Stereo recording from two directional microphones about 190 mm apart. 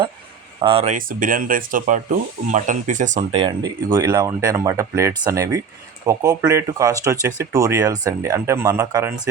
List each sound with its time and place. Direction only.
0.6 s speech: 30° right (ahead or behind)
0.9 s speech: 45° right (ahead or behind); by 9.1 s 15° right (ahead or behind)